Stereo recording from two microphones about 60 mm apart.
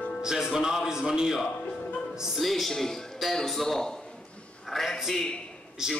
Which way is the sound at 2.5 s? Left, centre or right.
Centre.